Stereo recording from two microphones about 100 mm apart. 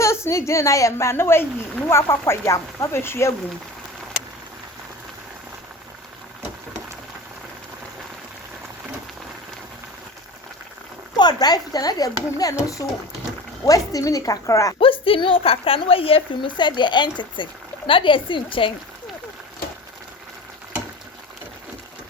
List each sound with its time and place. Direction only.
0.0 s a woman's voice: 30° left (ahead or behind)
11.2 s speech: 45° left (ahead or behind)
14.8 s a woman's voice: 65° left (ahead or behind)